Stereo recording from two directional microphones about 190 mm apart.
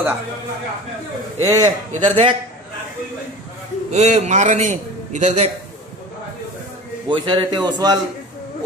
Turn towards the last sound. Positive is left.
turn(degrees=-20)  # may be behind; listen again after turning